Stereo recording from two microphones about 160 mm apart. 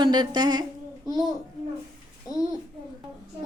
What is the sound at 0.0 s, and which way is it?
A child's voice, 25° right (ahead or behind).